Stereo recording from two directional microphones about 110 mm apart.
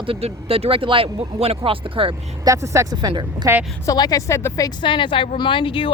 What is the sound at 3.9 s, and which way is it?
Speech, 35° left (ahead or behind).